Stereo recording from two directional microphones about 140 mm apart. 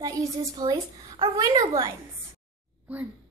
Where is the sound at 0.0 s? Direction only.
25° right (ahead or behind).